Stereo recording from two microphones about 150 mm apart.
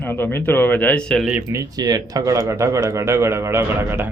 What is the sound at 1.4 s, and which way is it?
Speech, 25° right (ahead or behind).